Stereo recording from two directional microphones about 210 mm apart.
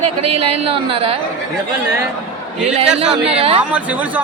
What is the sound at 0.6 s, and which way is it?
Speech, 25° right (ahead or behind).